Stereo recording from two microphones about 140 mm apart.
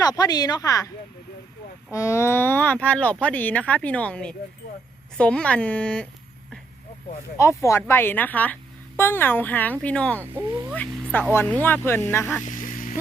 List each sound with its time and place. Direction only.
0.0 s speech: 25° left (ahead or behind)
1.9 s speech: 20° left (ahead or behind)
7.3 s speech: 20° left (ahead or behind)
12.5 s a sound: 70° left (ahead or behind)